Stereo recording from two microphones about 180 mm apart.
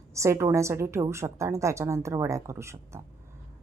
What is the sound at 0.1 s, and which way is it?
A woman's voice, 15° right (ahead or behind).